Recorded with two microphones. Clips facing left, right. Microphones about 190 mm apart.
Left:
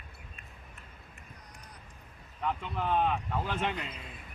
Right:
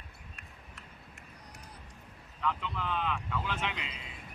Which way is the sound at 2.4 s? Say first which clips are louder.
Left 2 dB; 50° left (ahead or behind).